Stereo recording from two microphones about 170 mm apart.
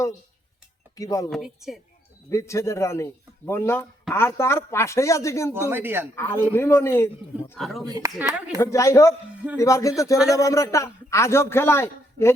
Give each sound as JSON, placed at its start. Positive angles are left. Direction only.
{"t": 0.9, "sound": "speech", "side_deg": 20}
{"t": 1.3, "sound": "a woman's voice", "side_deg": 0}
{"t": 2.3, "sound": "a man's voice", "side_deg": 15}
{"t": 5.5, "sound": "speech", "side_deg": -10}
{"t": 6.1, "sound": "a man's voice", "side_deg": 15}
{"t": 7.6, "sound": "a woman's voice", "side_deg": 0}
{"t": 7.9, "sound": "speech", "side_deg": -20}
{"t": 8.5, "sound": "a man's voice", "side_deg": 15}